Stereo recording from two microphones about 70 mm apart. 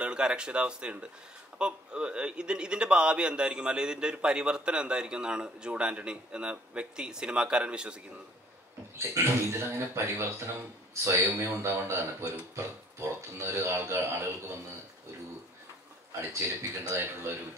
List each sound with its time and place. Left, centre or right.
0.0 s a man's voice: centre
8.9 s speech: right
16.3 s speech: right